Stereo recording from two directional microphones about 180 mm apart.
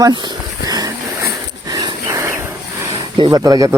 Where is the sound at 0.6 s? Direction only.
20° right (ahead or behind).